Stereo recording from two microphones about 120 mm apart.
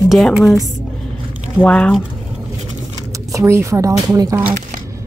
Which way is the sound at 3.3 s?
25° right (ahead or behind).